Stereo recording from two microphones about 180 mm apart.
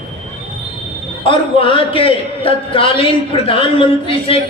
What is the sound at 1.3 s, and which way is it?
A man's voice, 30° left (ahead or behind).